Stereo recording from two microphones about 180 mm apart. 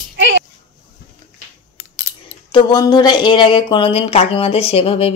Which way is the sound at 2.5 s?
25° left (ahead or behind).